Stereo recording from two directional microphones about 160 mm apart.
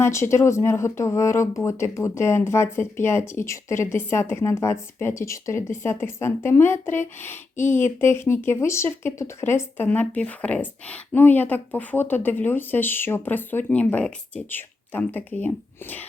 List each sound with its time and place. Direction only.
0.0 s speech: 15° left (ahead or behind)